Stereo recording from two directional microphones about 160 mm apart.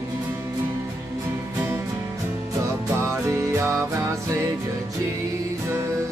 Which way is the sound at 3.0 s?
20° right (ahead or behind).